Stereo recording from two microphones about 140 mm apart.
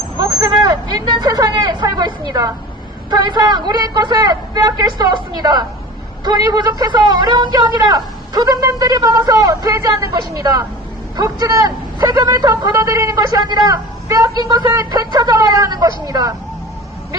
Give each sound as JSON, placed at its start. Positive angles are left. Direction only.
{"t": 0.2, "sound": "hubbub", "side_deg": -25}
{"t": 1.1, "sound": "a man's voice", "side_deg": -30}